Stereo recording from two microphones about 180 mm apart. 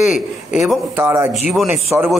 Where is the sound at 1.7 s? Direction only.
10° right (ahead or behind).